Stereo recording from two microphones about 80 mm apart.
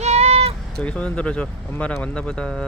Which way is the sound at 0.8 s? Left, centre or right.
Centre.